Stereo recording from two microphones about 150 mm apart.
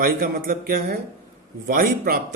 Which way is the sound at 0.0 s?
75° right (ahead or behind).